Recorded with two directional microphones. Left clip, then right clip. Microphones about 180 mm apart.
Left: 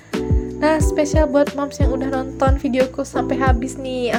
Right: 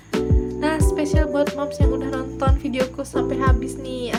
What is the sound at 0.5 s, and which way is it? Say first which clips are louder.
Music: left 6 dB; 35° left (ahead or behind).